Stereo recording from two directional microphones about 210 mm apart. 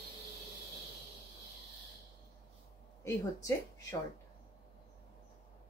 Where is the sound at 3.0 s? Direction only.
15° left (ahead or behind).